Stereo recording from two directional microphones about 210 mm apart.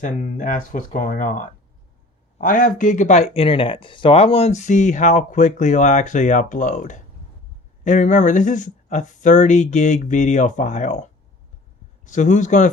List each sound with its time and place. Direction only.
0.0 s speech: 40° left (ahead or behind)